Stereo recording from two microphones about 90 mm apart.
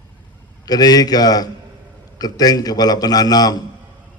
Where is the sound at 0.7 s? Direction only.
45° left (ahead or behind).